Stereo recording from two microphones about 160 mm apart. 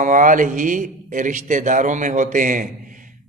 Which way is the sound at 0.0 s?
55° right (ahead or behind).